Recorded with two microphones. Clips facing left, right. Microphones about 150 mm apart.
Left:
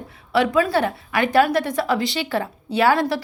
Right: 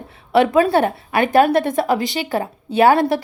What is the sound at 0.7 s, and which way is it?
A woman's voice, 50° right (ahead or behind).